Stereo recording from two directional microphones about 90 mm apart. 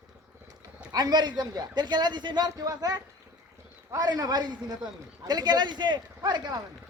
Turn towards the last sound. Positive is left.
turn(degrees=-55)  # may be behind; listen again after turning